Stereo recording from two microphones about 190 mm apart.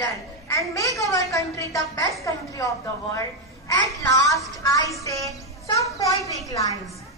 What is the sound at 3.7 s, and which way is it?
A woman's voice, 20° left (ahead or behind).